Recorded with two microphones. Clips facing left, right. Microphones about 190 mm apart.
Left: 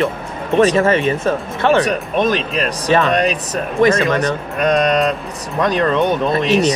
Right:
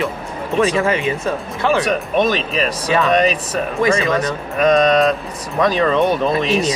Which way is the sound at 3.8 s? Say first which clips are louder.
Left 4 dB; 25° left (ahead or behind).